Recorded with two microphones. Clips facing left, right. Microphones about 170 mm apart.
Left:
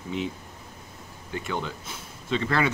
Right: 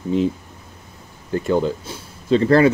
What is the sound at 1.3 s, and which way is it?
Speech, 35° right (ahead or behind).